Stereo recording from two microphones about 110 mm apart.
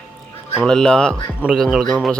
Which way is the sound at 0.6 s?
5° left (ahead or behind).